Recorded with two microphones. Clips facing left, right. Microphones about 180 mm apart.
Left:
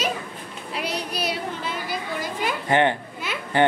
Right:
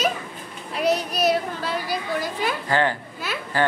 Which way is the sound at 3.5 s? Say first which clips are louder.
Left 3 dB; 20° left (ahead or behind).